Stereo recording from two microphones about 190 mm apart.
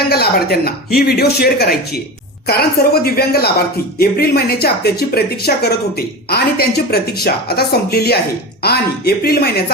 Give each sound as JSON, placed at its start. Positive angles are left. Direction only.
{"t": 0.1, "sound": "speech", "side_deg": 55}